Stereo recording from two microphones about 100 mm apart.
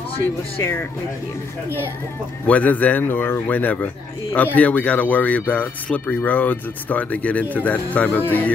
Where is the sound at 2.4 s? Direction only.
15° left (ahead or behind).